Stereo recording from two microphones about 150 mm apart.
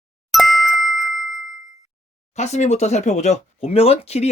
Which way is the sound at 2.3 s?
50° left (ahead or behind).